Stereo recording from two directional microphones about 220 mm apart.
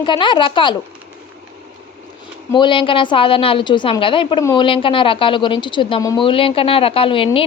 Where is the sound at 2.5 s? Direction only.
20° left (ahead or behind).